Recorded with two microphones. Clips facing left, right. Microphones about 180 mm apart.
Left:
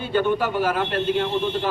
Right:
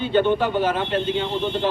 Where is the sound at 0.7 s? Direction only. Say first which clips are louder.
Even; 5° left (ahead or behind).